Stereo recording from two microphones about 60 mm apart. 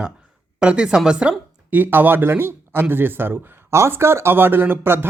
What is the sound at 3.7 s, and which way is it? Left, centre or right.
Speech, right.